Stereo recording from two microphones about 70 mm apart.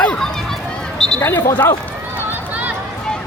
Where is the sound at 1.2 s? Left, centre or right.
Left.